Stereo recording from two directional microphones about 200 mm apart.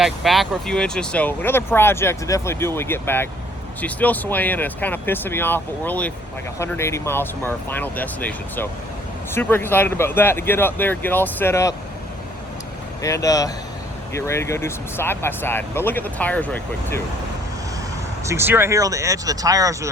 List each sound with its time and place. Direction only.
0.0 s speech: centre (ahead or behind)
13.0 s speech: 15° left (ahead or behind)
18.3 s speech: 10° right (ahead or behind)